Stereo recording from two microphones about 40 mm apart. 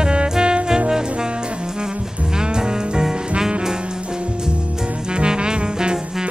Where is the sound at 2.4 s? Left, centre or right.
Centre.